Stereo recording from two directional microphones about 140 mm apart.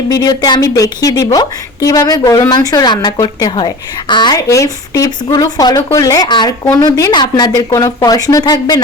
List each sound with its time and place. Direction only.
0.1 s speech: 25° left (ahead or behind)